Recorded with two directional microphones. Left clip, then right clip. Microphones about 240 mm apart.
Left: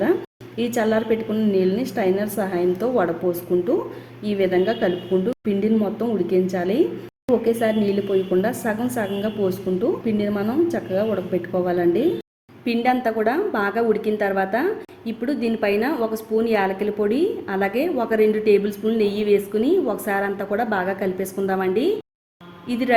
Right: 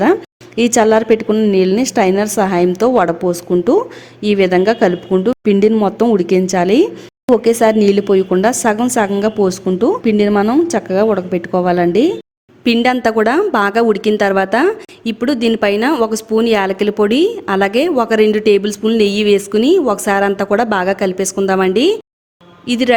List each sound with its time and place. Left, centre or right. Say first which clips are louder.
0.0 s a woman's voice: right 8 dB; right